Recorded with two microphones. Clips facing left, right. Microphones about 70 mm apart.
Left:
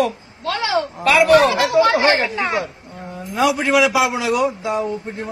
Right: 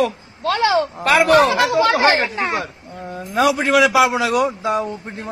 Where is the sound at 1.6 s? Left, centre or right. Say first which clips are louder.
Even; right.